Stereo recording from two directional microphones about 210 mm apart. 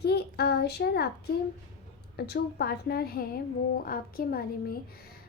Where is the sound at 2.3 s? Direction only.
50° left (ahead or behind).